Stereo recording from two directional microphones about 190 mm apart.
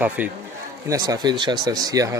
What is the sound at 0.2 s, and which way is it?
Speech, 10° right (ahead or behind).